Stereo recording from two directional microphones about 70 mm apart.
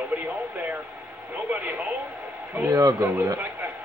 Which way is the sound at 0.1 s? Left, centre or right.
Right.